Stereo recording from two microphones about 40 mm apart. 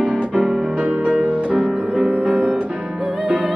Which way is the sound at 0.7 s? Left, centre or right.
Right.